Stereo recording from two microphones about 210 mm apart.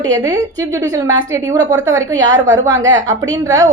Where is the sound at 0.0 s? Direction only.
15° right (ahead or behind).